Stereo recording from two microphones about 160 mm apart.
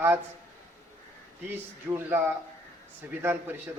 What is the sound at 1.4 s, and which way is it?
A man's voice, 10° right (ahead or behind).